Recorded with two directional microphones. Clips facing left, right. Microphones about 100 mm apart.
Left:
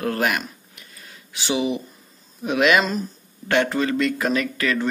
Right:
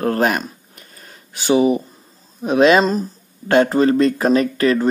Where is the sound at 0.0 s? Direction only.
35° right (ahead or behind).